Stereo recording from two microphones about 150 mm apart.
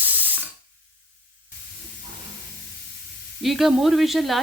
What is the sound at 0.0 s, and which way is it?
Ratchet, 10° right (ahead or behind).